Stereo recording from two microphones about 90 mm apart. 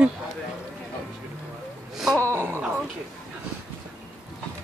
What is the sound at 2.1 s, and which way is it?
Wail, 25° left (ahead or behind).